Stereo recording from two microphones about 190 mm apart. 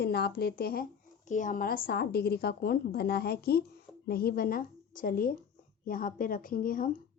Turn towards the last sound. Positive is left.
turn(degrees=50)  # may be behind; listen again after turning